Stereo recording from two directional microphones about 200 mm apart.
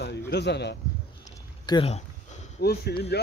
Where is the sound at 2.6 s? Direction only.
50° left (ahead or behind).